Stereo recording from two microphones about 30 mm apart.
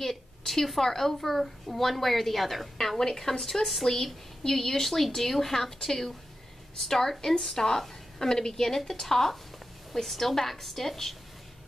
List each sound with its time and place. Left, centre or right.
0.5 s a woman's voice: centre
3.0 s a woman's voice: centre